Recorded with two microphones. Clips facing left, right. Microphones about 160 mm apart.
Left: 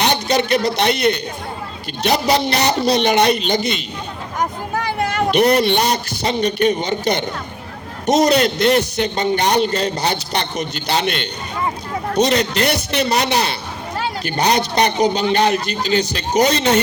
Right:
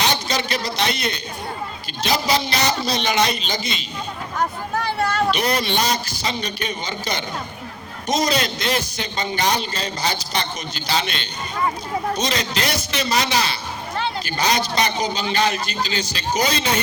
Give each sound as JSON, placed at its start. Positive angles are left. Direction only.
{"t": 0.0, "sound": "a man's voice", "side_deg": 60}
{"t": 4.9, "sound": "a sound", "side_deg": 15}
{"t": 5.3, "sound": "a man's voice", "side_deg": 60}